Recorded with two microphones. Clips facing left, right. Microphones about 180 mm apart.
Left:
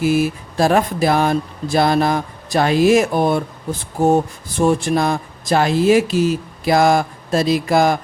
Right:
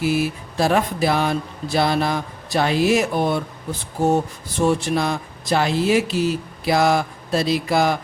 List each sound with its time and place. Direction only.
0.0 s speech: 45° left (ahead or behind)